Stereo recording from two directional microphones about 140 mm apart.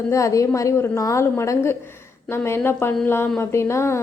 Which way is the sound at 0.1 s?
20° left (ahead or behind).